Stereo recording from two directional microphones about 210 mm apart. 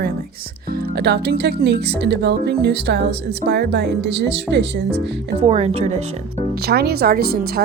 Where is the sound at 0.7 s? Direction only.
45° right (ahead or behind).